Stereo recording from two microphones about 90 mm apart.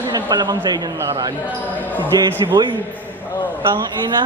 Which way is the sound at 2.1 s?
50° right (ahead or behind).